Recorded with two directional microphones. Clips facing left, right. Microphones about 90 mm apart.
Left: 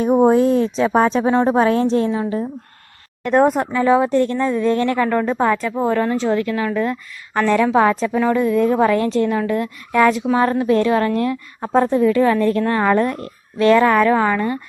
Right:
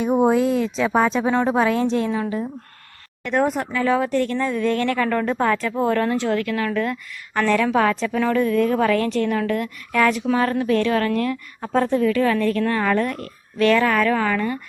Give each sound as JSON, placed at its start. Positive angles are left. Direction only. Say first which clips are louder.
{"t": 0.3, "sound": "a woman's voice", "louder": "left 4 dB", "side_deg": 35}
{"t": 3.2, "sound": "a woman's voice", "louder": "left 6 dB", "side_deg": 40}
{"t": 3.7, "sound": "a woman's voice", "louder": "left 5 dB", "side_deg": 25}
{"t": 9.3, "sound": "a woman's voice", "louder": "left 2 dB", "side_deg": 15}